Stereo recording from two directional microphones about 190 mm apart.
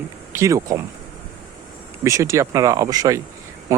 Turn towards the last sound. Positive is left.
turn(degrees=-20)  # may be behind; listen again after turning